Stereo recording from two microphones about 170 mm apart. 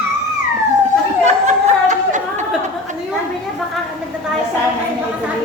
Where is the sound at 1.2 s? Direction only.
45° right (ahead or behind).